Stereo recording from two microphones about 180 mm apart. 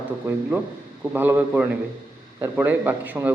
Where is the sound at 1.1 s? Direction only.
10° right (ahead or behind).